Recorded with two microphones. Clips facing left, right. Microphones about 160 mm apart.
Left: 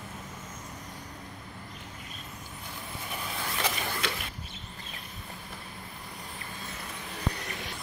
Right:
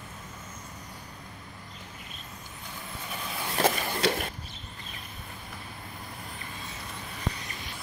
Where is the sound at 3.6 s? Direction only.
50° right (ahead or behind).